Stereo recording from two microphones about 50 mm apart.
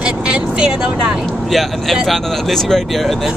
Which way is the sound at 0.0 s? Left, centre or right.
Centre.